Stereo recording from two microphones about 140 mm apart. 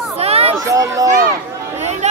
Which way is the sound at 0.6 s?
20° right (ahead or behind).